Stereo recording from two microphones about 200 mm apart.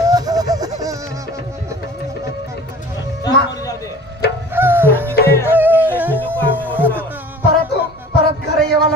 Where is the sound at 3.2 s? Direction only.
15° left (ahead or behind).